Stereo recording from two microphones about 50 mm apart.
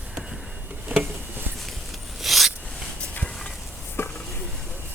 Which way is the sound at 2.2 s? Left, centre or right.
Centre.